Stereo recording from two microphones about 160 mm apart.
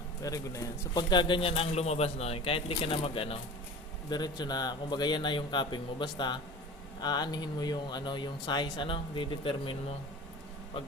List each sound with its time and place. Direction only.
0.2 s a man's voice: 20° left (ahead or behind); by 3.4 s 35° left (ahead or behind)
4.1 s speech: 25° left (ahead or behind)